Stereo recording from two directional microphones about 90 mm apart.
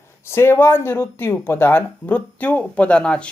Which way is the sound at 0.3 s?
30° left (ahead or behind).